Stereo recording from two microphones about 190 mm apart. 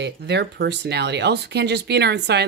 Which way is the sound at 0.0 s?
65° right (ahead or behind).